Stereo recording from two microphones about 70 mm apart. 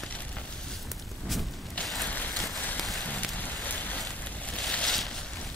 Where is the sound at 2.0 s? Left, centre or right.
Left.